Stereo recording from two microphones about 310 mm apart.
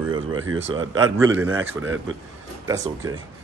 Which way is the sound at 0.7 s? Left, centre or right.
Centre.